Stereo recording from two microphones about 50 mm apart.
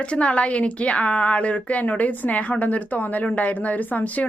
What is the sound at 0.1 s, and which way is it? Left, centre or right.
Speech, left.